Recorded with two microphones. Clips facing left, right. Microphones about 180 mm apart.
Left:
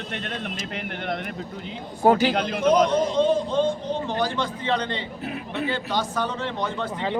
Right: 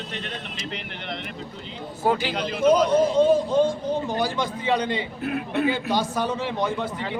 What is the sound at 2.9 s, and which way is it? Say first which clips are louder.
A man's voice: right 3 dB; 10° right (ahead or behind).